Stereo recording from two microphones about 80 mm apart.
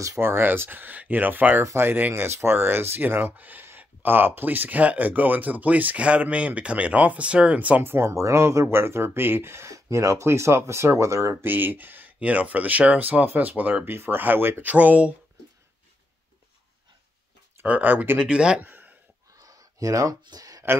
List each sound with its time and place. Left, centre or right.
0.0 s speech: right
1.6 s speech: right
11.4 s speech: right
17.6 s speech: centre
18.2 s speech: centre
18.6 s a sound: right
19.3 s a sound: right